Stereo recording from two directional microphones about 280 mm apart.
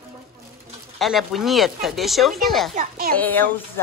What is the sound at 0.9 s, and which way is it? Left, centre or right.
Speech, centre.